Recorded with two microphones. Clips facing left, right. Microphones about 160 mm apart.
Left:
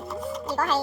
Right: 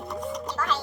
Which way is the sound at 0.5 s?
40° left (ahead or behind).